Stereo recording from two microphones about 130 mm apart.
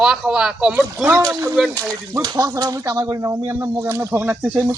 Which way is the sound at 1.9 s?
30° right (ahead or behind).